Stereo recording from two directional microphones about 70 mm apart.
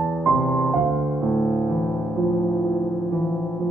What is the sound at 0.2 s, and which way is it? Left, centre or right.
Music, centre.